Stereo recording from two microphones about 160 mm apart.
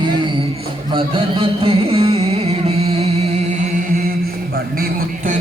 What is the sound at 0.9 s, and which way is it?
Music, 35° right (ahead or behind).